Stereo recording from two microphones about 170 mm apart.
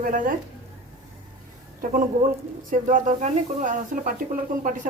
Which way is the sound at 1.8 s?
50° right (ahead or behind).